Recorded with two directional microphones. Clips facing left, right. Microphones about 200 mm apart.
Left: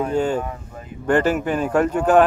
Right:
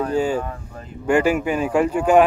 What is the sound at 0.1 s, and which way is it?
Speech, 5° right (ahead or behind).